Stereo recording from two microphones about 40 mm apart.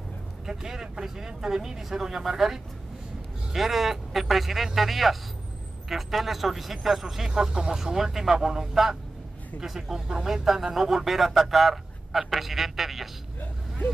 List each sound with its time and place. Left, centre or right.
0.5 s speech: centre
7.2 s speech: centre